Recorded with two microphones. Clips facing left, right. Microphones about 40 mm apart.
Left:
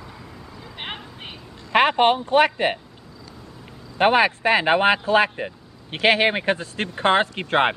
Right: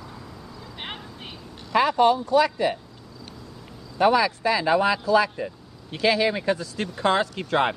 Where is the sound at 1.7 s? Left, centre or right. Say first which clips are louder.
Left 2 dB; left.